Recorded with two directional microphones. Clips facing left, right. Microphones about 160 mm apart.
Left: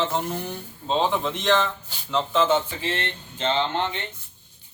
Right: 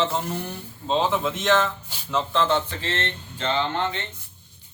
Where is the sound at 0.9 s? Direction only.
5° right (ahead or behind); by 4.0 s 15° left (ahead or behind).